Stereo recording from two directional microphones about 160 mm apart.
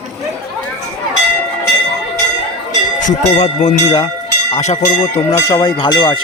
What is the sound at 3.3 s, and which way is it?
Speech, 45° left (ahead or behind).